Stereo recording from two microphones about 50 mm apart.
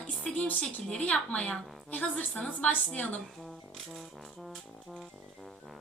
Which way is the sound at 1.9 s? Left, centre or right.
Left.